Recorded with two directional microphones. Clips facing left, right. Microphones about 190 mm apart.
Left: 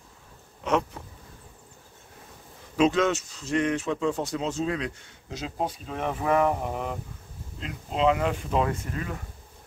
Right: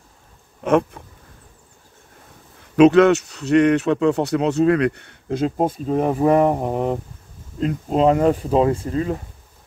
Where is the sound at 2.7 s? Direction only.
65° right (ahead or behind); by 9.1 s 30° right (ahead or behind).